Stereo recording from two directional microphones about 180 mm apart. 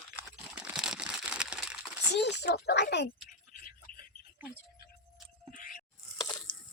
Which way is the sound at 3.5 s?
50° left (ahead or behind).